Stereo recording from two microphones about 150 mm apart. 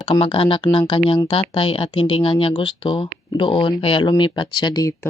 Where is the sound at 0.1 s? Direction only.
35° left (ahead or behind).